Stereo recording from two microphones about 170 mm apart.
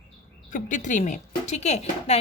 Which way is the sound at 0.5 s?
45° left (ahead or behind).